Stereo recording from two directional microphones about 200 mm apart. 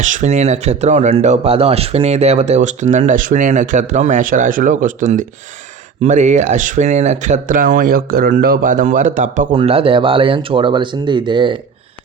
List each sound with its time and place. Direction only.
0.0 s speech: 40° right (ahead or behind)